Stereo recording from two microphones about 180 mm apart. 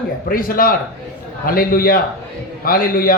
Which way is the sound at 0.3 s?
50° left (ahead or behind).